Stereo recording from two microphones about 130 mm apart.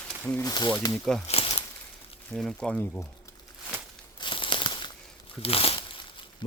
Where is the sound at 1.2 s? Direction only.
50° left (ahead or behind).